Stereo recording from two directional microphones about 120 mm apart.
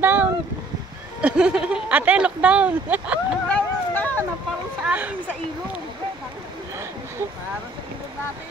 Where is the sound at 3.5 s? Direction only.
15° left (ahead or behind).